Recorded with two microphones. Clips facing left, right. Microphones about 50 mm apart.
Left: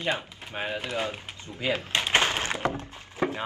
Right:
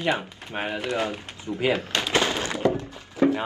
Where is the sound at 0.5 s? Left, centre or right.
Right.